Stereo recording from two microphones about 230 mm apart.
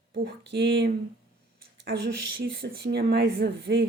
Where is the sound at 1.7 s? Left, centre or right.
Right.